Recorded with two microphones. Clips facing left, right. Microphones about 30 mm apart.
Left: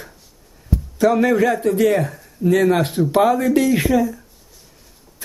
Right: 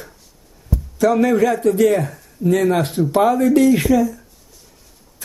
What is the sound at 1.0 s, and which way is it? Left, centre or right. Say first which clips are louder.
Speech: even; centre.